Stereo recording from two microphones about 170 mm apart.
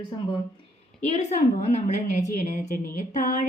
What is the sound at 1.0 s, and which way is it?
A woman's voice, 40° left (ahead or behind).